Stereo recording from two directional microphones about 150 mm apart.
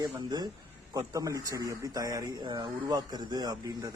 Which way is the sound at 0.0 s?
30° right (ahead or behind).